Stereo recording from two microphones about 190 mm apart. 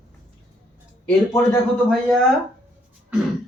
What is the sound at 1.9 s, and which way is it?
Speech, centre (ahead or behind).